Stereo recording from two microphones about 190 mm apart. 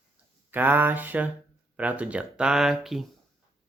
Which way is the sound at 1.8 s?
5° right (ahead or behind).